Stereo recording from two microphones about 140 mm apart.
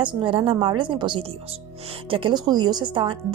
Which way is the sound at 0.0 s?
35° right (ahead or behind).